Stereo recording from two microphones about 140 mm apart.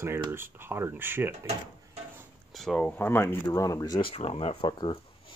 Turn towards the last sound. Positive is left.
turn(degrees=35)  # may be behind; listen again after turning